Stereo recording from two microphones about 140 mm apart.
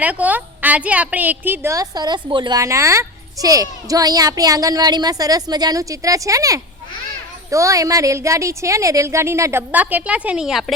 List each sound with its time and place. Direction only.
0.0 s a woman's voice: 10° right (ahead or behind)